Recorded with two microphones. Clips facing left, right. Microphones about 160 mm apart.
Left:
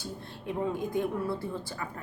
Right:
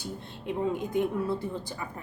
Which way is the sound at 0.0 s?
20° right (ahead or behind).